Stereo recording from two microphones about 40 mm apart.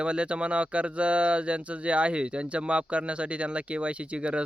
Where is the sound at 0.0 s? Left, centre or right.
Right.